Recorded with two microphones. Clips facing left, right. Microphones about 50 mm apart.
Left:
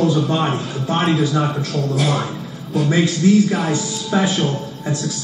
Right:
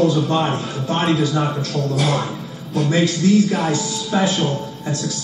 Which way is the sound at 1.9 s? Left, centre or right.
Centre.